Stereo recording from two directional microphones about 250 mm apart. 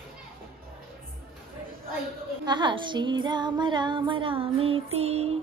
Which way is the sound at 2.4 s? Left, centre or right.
Centre.